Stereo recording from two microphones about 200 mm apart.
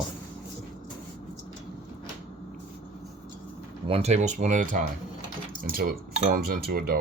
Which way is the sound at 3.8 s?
30° right (ahead or behind).